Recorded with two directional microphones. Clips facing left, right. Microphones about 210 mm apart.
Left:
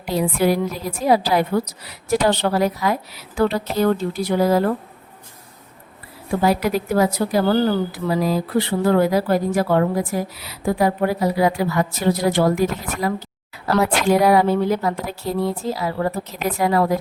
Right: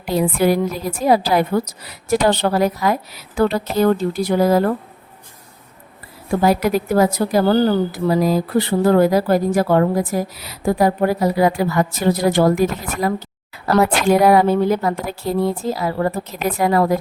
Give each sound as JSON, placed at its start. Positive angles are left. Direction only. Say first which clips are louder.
{"t": 0.1, "sound": "a woman's voice", "louder": "right 2 dB", "side_deg": -50}
{"t": 6.4, "sound": "a woman's voice", "louder": "right 2 dB", "side_deg": -45}